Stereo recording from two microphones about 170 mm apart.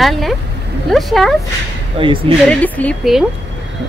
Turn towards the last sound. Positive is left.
turn(degrees=10)  # may be behind; listen again after turning